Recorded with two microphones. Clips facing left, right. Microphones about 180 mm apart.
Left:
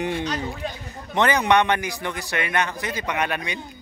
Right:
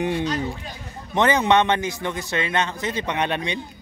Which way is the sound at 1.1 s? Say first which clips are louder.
Right 1 dB; 20° right (ahead or behind).